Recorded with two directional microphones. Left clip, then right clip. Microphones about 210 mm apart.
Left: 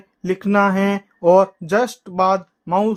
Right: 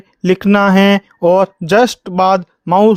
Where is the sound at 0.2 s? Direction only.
40° right (ahead or behind).